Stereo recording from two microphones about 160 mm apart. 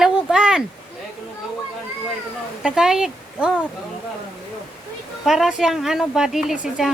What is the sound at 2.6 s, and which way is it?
Speech, 5° right (ahead or behind).